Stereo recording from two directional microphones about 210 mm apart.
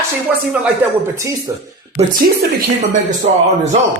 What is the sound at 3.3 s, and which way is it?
Speech, 35° right (ahead or behind).